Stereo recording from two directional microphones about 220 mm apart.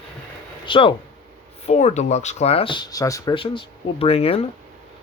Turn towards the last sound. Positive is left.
turn(degrees=25)  # may be behind; listen again after turning